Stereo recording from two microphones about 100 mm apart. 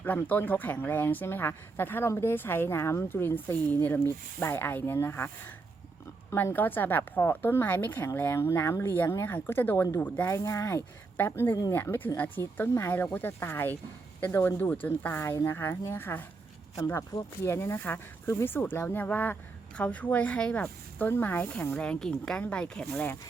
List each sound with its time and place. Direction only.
0.0 s speech: 15° left (ahead or behind)